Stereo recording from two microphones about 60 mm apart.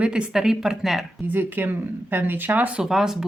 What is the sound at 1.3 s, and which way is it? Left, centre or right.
Speech, right.